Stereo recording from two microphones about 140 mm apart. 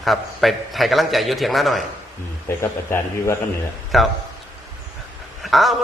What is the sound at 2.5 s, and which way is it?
Speech, 20° left (ahead or behind).